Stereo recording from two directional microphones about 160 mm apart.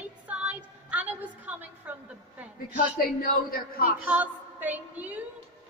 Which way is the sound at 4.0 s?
10° right (ahead or behind).